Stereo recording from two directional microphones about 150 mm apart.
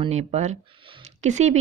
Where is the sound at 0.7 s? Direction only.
35° right (ahead or behind).